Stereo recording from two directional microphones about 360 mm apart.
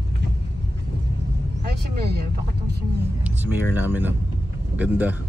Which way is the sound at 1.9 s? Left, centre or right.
Right.